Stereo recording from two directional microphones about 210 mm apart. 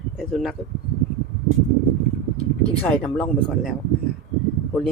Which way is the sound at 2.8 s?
10° left (ahead or behind).